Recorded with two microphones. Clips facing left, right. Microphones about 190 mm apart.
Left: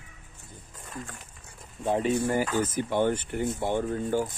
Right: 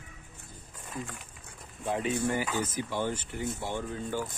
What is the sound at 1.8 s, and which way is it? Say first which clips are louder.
Speech: left 5 dB; 30° left (ahead or behind).